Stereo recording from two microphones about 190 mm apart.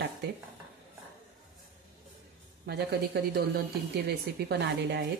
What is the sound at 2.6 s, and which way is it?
Speech, 60° right (ahead or behind).